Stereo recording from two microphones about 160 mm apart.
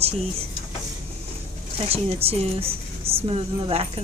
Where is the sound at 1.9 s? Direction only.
40° right (ahead or behind).